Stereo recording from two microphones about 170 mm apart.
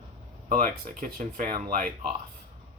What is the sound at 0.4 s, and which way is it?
Speech, 50° right (ahead or behind).